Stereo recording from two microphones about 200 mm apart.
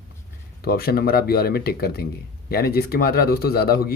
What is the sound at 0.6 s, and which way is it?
Speech, 50° left (ahead or behind).